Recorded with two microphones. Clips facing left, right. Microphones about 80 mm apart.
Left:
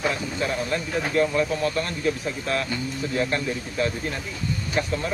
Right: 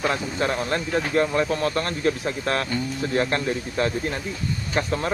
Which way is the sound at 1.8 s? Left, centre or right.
Right.